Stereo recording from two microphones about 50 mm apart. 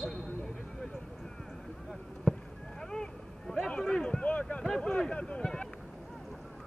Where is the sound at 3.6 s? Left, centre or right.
Centre.